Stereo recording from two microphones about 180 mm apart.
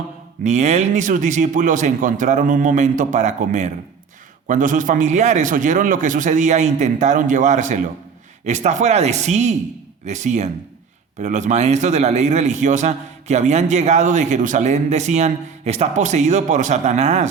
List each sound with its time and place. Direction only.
0.4 s a man's voice: 40° right (ahead or behind)